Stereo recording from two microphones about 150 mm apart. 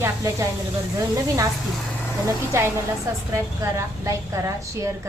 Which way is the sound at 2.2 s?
15° right (ahead or behind).